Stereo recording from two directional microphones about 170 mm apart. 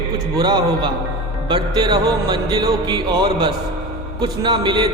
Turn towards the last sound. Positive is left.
turn(degrees=-25)  # may be behind; listen again after turning